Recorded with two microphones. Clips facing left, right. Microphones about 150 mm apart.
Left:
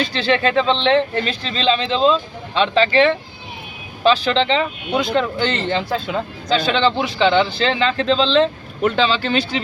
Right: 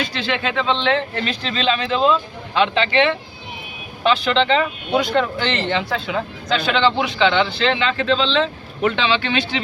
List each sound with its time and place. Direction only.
0.0 s a man's voice: 30° left (ahead or behind)